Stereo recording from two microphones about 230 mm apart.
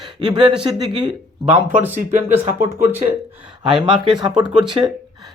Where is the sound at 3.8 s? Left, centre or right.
Centre.